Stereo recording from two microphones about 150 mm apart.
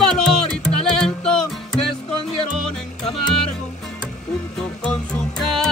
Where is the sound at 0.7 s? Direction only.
5° left (ahead or behind).